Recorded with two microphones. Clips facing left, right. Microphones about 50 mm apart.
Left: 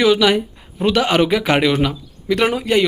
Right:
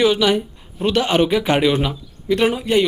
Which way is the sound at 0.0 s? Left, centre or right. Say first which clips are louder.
Left 2 dB; left.